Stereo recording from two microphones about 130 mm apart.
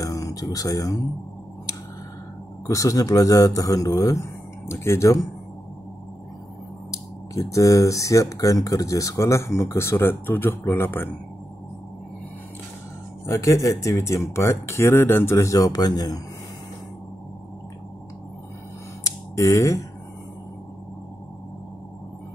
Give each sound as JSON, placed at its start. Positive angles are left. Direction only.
{"t": 0.0, "sound": "a sound", "side_deg": 25}
{"t": 2.6, "sound": "speech", "side_deg": 25}
{"t": 6.9, "sound": "speech", "side_deg": 25}
{"t": 13.3, "sound": "speech", "side_deg": 25}
{"t": 19.0, "sound": "finger snapping", "side_deg": 25}